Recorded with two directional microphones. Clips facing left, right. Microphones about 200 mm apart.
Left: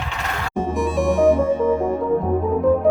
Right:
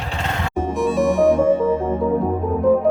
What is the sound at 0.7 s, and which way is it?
Music, centre (ahead or behind).